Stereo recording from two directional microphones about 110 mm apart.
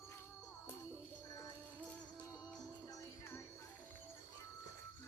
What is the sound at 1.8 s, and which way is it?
Music, 5° left (ahead or behind).